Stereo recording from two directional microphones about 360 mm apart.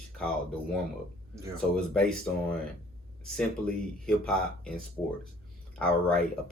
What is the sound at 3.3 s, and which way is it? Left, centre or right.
Speech, centre.